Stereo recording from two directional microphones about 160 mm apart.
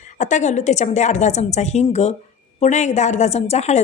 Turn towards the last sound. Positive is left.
turn(degrees=45)  # may be behind; listen again after turning